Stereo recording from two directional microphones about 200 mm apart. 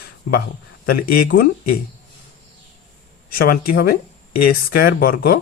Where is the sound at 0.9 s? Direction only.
45° left (ahead or behind).